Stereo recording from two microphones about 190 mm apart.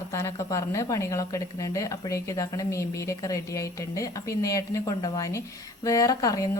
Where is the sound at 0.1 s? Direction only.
15° left (ahead or behind).